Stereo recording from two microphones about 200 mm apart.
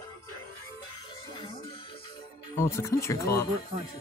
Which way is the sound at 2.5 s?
15° left (ahead or behind).